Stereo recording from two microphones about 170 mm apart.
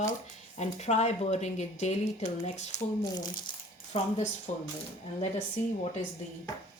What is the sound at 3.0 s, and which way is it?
Speech, 25° left (ahead or behind).